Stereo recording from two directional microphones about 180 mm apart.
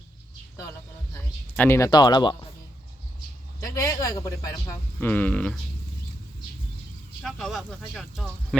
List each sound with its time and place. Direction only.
1.1 s speech: 10° left (ahead or behind)
3.6 s a sound: 20° left (ahead or behind)
4.9 s speech: 10° left (ahead or behind)
7.2 s speech: centre (ahead or behind)